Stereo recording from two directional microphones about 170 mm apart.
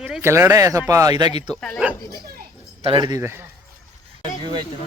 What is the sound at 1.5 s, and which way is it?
Speech, 5° left (ahead or behind).